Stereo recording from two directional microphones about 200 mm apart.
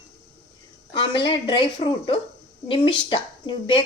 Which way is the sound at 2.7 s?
25° left (ahead or behind).